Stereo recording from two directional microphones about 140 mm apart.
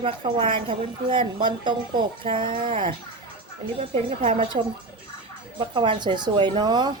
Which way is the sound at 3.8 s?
45° right (ahead or behind).